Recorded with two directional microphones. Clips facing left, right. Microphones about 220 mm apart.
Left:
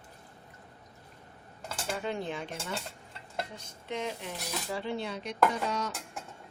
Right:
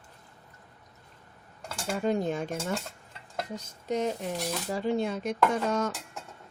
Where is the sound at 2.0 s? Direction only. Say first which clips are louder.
Right 9 dB; 40° right (ahead or behind).